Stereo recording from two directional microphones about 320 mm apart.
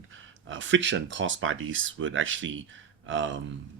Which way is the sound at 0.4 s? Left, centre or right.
Right.